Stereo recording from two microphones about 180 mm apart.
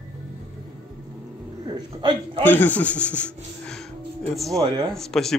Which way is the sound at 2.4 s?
10° left (ahead or behind).